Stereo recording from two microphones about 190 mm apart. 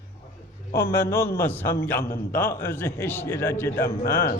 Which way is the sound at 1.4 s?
10° left (ahead or behind).